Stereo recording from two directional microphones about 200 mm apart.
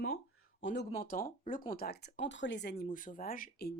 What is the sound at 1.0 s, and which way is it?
A woman's voice, 45° left (ahead or behind).